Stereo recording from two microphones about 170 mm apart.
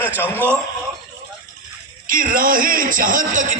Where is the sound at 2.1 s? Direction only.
55° right (ahead or behind).